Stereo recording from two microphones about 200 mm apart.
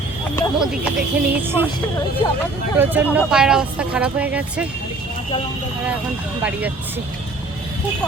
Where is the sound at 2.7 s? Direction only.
10° right (ahead or behind).